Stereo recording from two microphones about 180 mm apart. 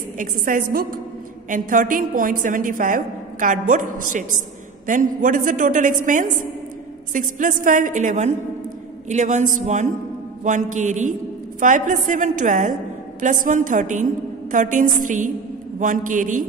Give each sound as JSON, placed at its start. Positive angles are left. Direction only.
{"t": 0.2, "sound": "a woman's voice", "side_deg": -50}